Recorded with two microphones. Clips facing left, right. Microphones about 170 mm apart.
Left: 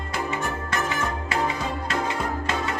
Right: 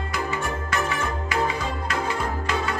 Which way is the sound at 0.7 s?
25° left (ahead or behind).